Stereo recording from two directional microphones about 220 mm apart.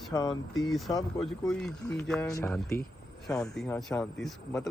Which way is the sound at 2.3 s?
15° left (ahead or behind).